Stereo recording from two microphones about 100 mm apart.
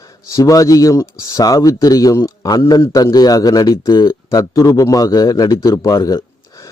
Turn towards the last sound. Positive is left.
turn(degrees=40)  # may be behind; listen again after turning